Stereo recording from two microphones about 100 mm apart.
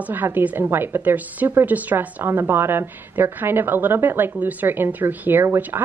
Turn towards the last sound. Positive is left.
turn(degrees=-20)  # may be behind; listen again after turning